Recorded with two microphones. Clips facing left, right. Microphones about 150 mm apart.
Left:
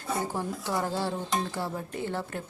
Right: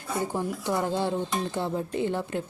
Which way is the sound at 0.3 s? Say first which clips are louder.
Right 3 dB; 15° right (ahead or behind).